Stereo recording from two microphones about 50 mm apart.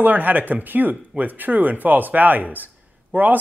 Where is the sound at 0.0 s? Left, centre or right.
Right.